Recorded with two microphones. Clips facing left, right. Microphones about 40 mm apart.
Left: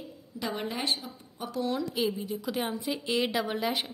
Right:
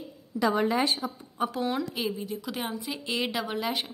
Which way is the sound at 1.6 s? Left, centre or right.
Right.